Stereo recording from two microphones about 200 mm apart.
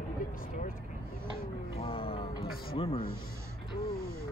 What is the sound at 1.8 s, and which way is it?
Music, 25° left (ahead or behind).